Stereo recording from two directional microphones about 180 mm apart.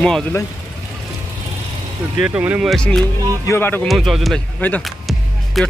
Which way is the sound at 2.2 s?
5° right (ahead or behind).